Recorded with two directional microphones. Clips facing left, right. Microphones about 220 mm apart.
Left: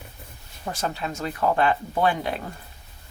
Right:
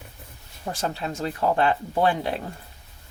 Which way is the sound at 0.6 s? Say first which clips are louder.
Even; 30° right (ahead or behind).